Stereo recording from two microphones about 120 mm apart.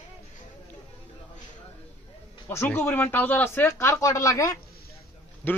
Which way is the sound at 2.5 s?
20° left (ahead or behind).